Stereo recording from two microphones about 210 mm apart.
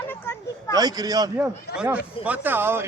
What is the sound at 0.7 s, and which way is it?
Speech, 20° right (ahead or behind).